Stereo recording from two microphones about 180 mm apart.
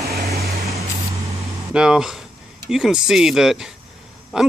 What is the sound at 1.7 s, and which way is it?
Speech, 5° right (ahead or behind).